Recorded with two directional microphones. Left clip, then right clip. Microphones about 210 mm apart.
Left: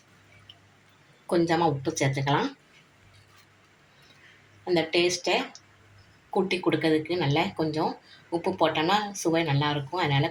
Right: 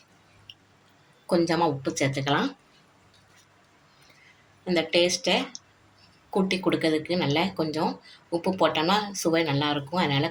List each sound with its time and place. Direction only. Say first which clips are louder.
1.3 s speech: even; 50° right (ahead or behind)
4.6 s speech: right 1 dB; 50° right (ahead or behind)